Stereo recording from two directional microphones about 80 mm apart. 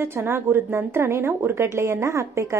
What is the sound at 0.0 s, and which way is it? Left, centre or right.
A woman's voice, right.